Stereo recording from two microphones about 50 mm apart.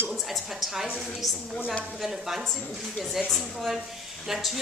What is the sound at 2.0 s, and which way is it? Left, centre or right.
Speech, centre.